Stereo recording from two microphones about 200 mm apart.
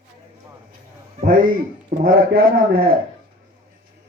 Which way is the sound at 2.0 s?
45° right (ahead or behind).